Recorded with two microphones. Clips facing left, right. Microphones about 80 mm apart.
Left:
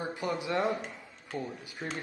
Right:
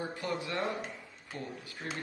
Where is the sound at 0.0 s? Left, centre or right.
Centre.